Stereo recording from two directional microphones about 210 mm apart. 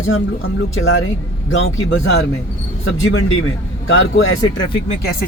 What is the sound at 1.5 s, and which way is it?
A man's voice, 60° left (ahead or behind).